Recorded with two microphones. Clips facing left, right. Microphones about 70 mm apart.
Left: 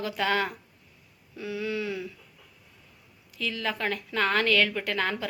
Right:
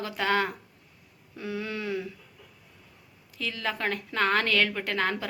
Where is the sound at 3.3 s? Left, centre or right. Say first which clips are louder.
Left 1 dB; right.